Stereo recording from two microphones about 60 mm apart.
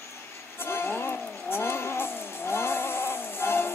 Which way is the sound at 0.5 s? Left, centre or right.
Left.